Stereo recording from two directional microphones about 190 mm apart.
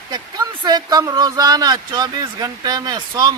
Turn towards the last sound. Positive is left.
turn(degrees=-20)  # may be behind; listen again after turning